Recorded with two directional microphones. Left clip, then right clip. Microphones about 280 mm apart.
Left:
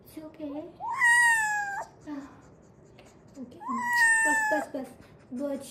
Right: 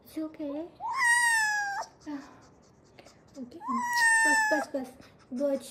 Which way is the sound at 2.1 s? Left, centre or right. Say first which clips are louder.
Even; right.